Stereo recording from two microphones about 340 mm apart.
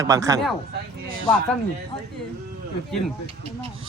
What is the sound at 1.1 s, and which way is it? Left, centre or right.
Speech, right.